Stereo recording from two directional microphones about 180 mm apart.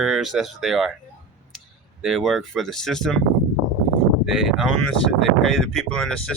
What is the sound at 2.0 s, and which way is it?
Speech, centre (ahead or behind).